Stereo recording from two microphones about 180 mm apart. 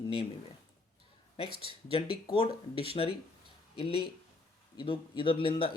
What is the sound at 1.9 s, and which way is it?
Speech, 30° left (ahead or behind).